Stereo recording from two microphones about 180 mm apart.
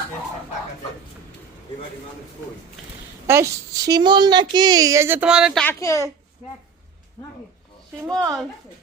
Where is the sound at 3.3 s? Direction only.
15° right (ahead or behind); by 6.1 s 15° left (ahead or behind).